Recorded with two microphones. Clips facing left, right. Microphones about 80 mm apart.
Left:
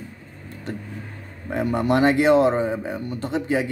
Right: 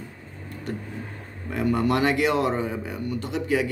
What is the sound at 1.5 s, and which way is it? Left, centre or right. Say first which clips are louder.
A man's voice: left 2 dB; left.